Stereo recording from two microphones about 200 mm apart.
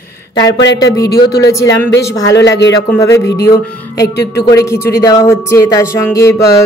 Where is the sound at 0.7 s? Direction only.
20° left (ahead or behind).